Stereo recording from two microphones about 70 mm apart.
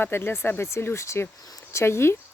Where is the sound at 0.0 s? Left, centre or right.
Left.